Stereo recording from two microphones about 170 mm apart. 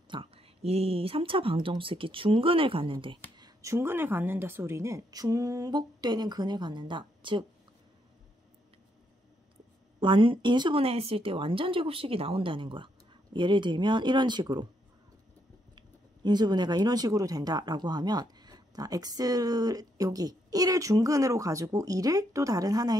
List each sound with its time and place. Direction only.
0.1 s speech: 35° right (ahead or behind)
9.9 s speech: 30° right (ahead or behind)
15.7 s speech: 25° right (ahead or behind)